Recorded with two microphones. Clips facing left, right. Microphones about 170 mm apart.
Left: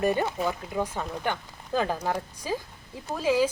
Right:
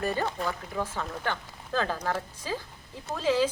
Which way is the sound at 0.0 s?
15° left (ahead or behind).